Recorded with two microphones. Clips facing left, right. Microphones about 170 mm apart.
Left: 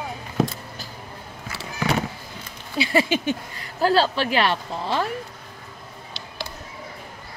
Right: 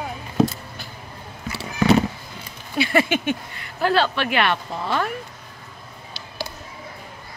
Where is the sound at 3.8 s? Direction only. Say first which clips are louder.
Left 1 dB; 35° left (ahead or behind).